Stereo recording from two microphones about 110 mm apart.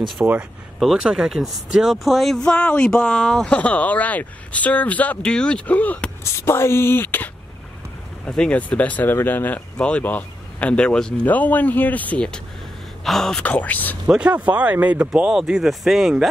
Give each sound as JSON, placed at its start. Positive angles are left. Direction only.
{"t": 0.2, "sound": "speech", "side_deg": -15}
{"t": 0.7, "sound": "speech", "side_deg": -5}
{"t": 6.2, "sound": "speech", "side_deg": 25}
{"t": 8.3, "sound": "speech", "side_deg": 10}
{"t": 14.0, "sound": "speech", "side_deg": -10}